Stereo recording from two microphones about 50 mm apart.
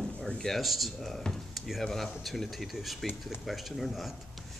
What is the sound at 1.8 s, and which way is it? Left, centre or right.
Speech, centre.